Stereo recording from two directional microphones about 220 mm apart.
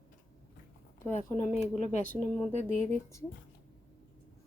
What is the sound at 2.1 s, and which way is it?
Speech, 5° left (ahead or behind).